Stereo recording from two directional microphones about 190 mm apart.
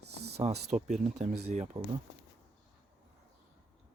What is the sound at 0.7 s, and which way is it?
Speech, 40° right (ahead or behind).